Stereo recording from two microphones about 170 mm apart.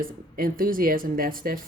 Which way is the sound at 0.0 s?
55° right (ahead or behind).